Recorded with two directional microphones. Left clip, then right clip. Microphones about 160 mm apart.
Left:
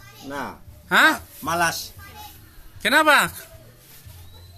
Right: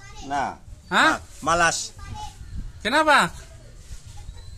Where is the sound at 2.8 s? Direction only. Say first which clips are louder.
Left 2 dB; 20° left (ahead or behind).